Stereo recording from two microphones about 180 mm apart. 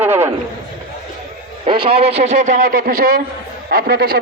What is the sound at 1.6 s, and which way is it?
A man's voice, 30° right (ahead or behind).